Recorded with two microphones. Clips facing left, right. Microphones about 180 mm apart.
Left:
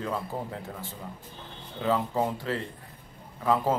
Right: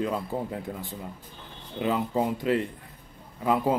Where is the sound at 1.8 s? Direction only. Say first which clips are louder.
Right 1 dB; 15° right (ahead or behind).